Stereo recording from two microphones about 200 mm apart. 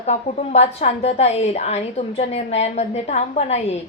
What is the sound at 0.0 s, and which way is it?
A woman's voice, 35° left (ahead or behind).